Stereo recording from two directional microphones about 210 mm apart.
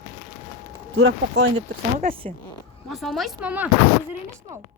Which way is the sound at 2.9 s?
Centre (ahead or behind).